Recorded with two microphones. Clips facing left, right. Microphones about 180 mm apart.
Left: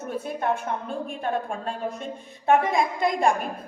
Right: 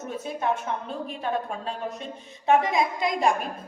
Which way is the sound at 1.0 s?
50° left (ahead or behind).